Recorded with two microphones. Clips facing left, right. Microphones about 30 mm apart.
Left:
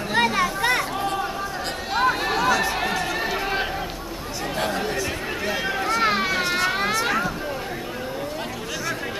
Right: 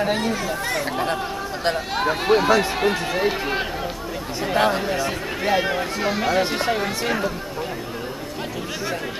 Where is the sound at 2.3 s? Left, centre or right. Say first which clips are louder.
Right 3 dB; centre.